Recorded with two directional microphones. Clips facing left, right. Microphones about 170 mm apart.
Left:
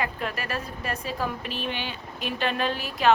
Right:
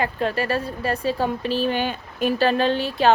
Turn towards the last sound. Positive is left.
turn(degrees=-30)  # may be behind; listen again after turning